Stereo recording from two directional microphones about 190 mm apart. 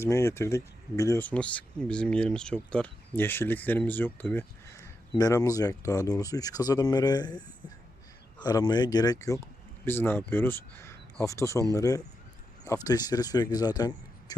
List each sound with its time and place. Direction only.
0.0 s speech: 15° left (ahead or behind)